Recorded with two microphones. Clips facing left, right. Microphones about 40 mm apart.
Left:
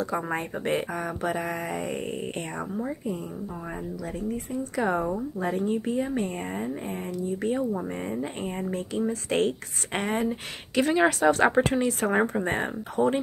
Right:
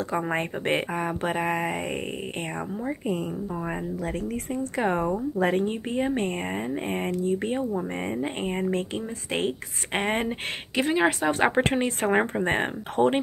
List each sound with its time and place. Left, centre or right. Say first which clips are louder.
0.1 s speech: right 2 dB; right
4.2 s speech: right 1 dB; right
4.7 s speech: right 1 dB; right
5.4 s speech: right 2 dB; right
6.9 s speech: right 5 dB; right
8.0 s speech: right 2 dB; right
9.3 s speech: left 1 dB; centre
9.9 s speech: right 1 dB; right
10.8 s speech: left 2 dB; right
11.5 s speech: even; right
12.4 s speech: right 2 dB; right